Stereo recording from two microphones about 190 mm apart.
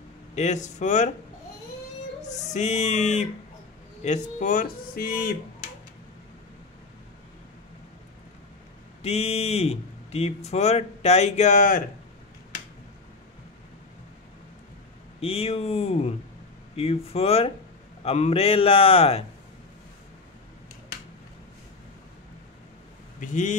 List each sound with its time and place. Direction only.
0.3 s speech: 40° left (ahead or behind)
2.2 s speech: 40° left (ahead or behind)
9.0 s speech: 35° left (ahead or behind)
15.1 s speech: 30° left (ahead or behind)
23.2 s speech: 40° left (ahead or behind)